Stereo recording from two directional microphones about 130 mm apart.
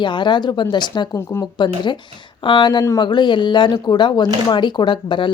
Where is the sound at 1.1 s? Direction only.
25° left (ahead or behind).